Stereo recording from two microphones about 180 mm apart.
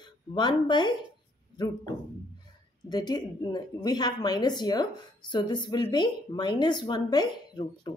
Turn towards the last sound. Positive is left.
turn(degrees=25)  # may be behind; listen again after turning